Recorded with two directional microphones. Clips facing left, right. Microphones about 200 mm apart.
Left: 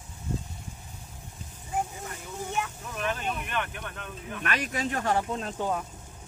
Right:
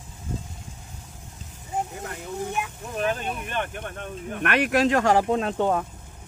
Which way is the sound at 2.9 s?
35° right (ahead or behind).